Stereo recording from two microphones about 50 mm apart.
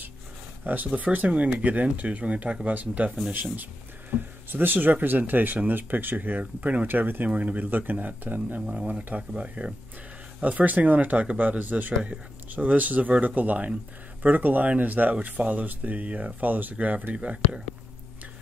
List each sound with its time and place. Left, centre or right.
0.8 s speech: right
4.1 s speech: right
7.2 s speech: right
8.8 s speech: right
10.4 s speech: right